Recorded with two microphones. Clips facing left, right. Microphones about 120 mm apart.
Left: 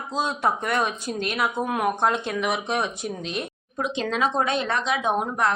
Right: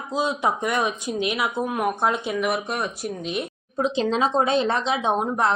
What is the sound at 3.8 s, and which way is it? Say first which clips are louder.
Speech: right 3 dB; 30° right (ahead or behind).